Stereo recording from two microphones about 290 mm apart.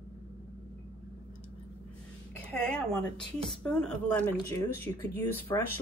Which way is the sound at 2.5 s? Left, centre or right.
Centre.